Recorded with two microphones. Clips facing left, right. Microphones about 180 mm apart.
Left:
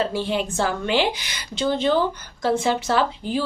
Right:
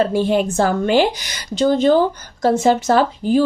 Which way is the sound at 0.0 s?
50° right (ahead or behind).